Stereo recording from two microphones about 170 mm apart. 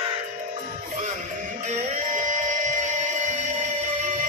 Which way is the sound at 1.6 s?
45° right (ahead or behind).